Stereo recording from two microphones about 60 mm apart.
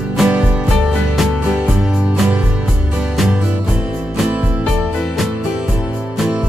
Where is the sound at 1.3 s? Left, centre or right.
Centre.